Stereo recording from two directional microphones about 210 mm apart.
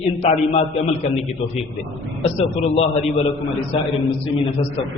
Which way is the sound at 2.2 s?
30° left (ahead or behind).